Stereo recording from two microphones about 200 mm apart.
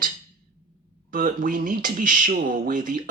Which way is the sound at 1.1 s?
45° right (ahead or behind).